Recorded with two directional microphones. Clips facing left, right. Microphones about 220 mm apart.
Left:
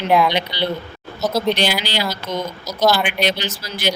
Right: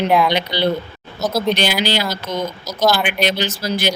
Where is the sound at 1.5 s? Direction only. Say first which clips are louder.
Right 2 dB; 45° right (ahead or behind).